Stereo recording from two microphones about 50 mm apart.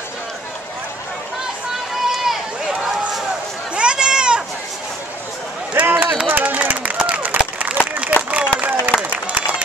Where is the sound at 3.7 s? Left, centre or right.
Centre.